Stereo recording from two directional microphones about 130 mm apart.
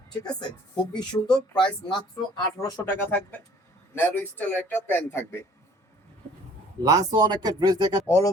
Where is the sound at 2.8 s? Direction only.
15° left (ahead or behind).